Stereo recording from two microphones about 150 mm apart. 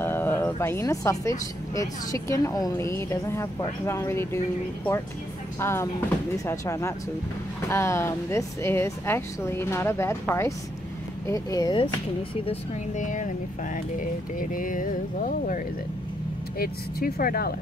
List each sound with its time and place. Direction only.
0.0 s a sound: 15° left (ahead or behind)
1.8 s a woman's voice: 20° left (ahead or behind)
5.6 s a woman's voice: 15° left (ahead or behind); by 12.5 s 35° left (ahead or behind)
12.9 s speech: 55° left (ahead or behind)
16.5 s speech: 80° left